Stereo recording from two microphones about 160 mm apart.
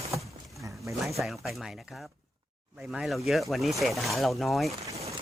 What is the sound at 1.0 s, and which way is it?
Speech, centre (ahead or behind).